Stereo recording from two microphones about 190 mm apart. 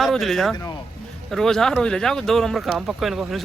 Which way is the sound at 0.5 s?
20° left (ahead or behind).